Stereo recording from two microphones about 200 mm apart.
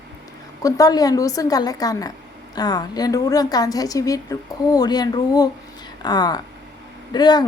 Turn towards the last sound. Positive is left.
turn(degrees=20)  # may be behind; listen again after turning